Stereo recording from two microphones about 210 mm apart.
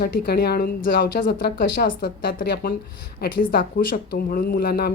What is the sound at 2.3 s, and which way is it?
Speech, 40° left (ahead or behind).